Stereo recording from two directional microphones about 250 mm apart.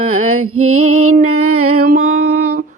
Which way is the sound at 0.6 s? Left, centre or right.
Right.